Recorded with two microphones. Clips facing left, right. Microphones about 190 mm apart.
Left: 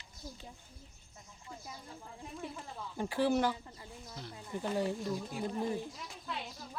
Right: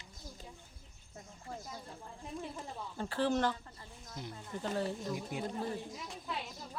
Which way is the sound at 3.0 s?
10° left (ahead or behind).